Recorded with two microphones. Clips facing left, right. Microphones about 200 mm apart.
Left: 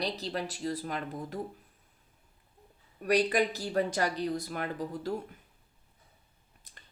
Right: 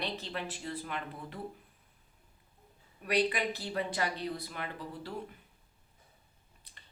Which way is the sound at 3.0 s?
45° left (ahead or behind).